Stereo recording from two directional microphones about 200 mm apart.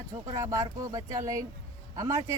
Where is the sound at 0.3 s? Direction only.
15° right (ahead or behind).